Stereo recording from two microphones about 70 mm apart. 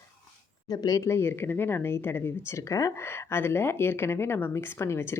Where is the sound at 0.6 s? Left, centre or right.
Left.